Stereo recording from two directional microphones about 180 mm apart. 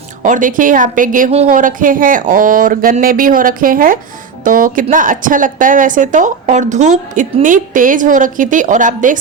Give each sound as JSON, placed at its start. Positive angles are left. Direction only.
{"t": 0.2, "sound": "a woman's voice", "side_deg": -45}